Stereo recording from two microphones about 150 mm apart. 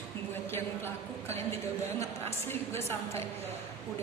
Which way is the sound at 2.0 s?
15° left (ahead or behind).